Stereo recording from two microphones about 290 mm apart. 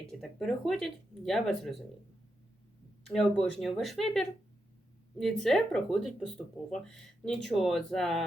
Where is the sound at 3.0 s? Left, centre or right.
Centre.